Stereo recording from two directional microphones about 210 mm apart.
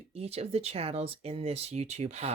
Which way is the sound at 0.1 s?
30° right (ahead or behind).